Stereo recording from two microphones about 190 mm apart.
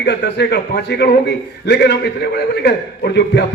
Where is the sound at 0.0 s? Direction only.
65° left (ahead or behind).